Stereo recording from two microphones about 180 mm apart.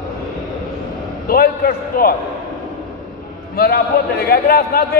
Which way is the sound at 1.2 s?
55° left (ahead or behind).